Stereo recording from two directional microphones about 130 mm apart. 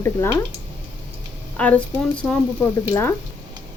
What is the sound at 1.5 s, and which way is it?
Speech, 10° left (ahead or behind).